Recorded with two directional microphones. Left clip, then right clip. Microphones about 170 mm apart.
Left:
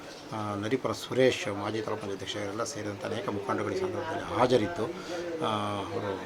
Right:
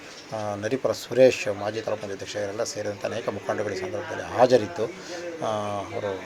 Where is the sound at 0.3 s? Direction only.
20° right (ahead or behind).